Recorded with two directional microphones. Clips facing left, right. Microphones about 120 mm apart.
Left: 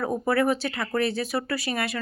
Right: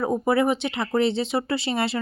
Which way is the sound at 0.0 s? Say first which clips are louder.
Right 2 dB; 20° right (ahead or behind).